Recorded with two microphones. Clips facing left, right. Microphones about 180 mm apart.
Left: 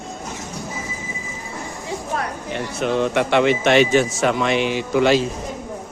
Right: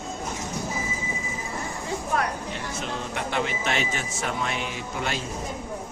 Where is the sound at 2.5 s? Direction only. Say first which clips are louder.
Left 9 dB; 65° left (ahead or behind); by 5.2 s 90° left.